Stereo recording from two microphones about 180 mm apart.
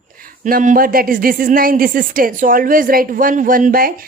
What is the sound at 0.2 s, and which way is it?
A woman's voice, 50° right (ahead or behind).